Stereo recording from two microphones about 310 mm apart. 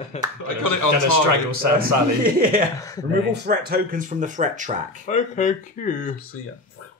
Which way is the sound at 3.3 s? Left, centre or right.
Right.